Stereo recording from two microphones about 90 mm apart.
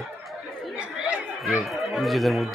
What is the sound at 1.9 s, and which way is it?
Speech, centre (ahead or behind).